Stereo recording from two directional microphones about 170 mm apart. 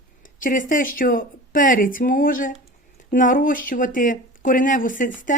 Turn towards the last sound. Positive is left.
turn(degrees=50)  # may be behind; listen again after turning